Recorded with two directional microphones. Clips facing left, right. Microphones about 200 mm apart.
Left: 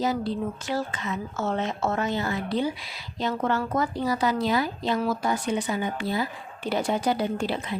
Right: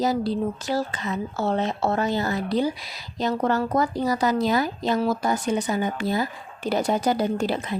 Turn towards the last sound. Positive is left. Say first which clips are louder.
# right 3 dB
turn(degrees=-40)  # may be behind; listen again after turning